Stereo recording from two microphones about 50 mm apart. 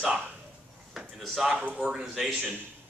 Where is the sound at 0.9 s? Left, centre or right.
Centre.